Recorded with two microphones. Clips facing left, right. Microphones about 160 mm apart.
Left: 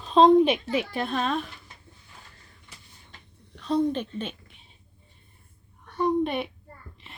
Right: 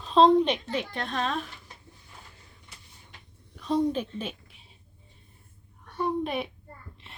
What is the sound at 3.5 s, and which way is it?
A woman's voice, 10° right (ahead or behind).